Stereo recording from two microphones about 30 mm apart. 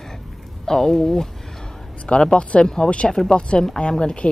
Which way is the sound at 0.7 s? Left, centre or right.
Centre.